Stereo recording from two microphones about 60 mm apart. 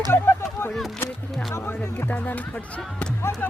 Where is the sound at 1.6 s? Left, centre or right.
Left.